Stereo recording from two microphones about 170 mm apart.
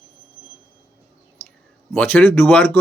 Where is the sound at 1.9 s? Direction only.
5° left (ahead or behind).